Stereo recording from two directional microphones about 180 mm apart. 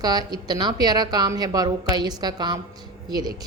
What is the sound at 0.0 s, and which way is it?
A woman's voice, 20° right (ahead or behind).